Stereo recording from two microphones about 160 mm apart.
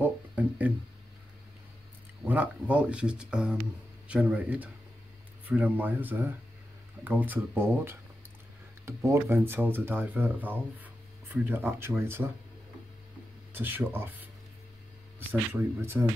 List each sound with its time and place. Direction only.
0.0 s a sound: 10° right (ahead or behind)
2.2 s speech: 10° right (ahead or behind)
13.5 s speech: 10° right (ahead or behind)
15.8 s speech: 15° right (ahead or behind)